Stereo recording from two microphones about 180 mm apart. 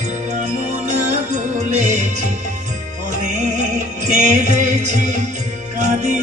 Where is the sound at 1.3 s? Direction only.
40° right (ahead or behind).